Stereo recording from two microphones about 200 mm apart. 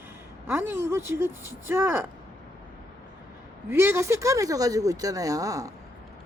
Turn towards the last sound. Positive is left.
turn(degrees=-15)  # may be behind; listen again after turning